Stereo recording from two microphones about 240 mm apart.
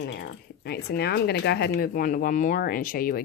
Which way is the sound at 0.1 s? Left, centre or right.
Left.